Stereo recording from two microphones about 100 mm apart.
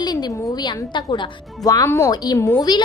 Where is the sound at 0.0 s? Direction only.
45° left (ahead or behind).